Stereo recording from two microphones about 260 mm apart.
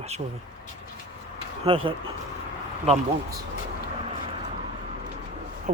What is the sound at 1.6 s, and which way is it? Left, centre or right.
Speech, right.